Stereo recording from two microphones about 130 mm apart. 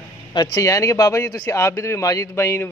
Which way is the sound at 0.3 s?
30° left (ahead or behind).